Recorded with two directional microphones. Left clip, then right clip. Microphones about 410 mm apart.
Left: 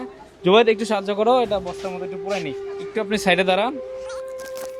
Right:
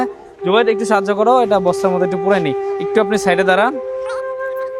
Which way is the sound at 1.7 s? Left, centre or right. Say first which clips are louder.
Right 14 dB; right.